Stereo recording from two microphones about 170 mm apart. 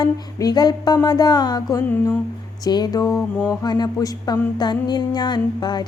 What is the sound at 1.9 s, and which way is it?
Speech, 10° left (ahead or behind).